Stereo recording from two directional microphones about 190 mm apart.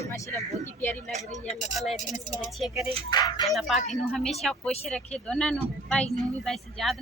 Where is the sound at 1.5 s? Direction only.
40° left (ahead or behind).